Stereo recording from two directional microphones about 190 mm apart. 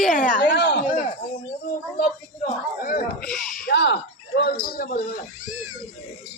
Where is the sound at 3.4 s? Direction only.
Centre (ahead or behind).